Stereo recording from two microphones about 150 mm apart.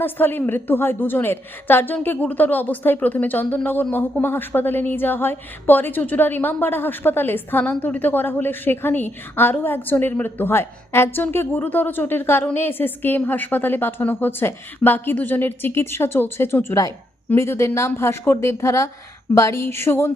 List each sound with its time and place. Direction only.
0.0 s a woman's voice: 15° left (ahead or behind)